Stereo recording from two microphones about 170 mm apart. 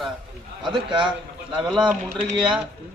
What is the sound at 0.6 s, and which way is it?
Speech, 30° right (ahead or behind).